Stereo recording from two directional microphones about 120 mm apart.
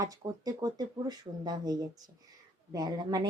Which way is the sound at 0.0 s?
30° right (ahead or behind).